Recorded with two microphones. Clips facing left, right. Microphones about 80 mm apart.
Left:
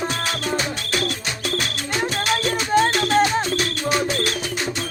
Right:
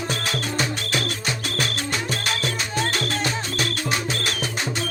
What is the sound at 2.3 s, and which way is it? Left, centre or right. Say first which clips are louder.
Music: left 7 dB; left.